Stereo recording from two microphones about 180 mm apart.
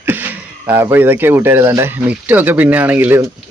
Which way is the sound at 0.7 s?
10° right (ahead or behind).